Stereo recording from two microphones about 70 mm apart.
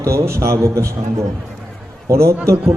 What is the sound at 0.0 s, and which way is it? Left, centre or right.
Speech, right.